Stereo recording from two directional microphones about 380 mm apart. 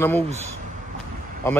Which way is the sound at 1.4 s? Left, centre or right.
Centre.